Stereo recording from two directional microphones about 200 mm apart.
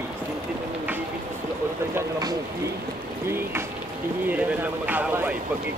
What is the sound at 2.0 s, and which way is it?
Speech, 20° right (ahead or behind).